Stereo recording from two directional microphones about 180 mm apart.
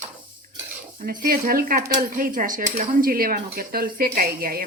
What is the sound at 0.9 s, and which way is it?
Speech, 55° right (ahead or behind).